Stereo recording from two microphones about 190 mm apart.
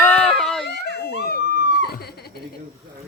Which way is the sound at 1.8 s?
55° left (ahead or behind).